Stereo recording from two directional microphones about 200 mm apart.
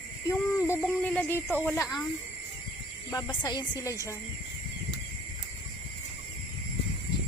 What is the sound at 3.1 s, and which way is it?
Speech, 15° left (ahead or behind).